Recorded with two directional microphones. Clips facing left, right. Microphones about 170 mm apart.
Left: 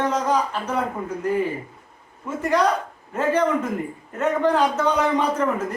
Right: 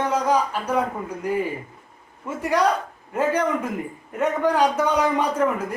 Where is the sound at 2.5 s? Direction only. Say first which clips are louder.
Even; 10° right (ahead or behind).